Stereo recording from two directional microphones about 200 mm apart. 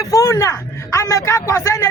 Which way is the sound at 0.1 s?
15° left (ahead or behind).